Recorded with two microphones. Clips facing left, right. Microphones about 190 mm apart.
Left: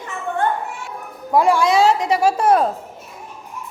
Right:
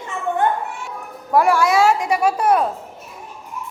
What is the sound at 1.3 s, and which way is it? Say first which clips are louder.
Speech: even; 15° left (ahead or behind).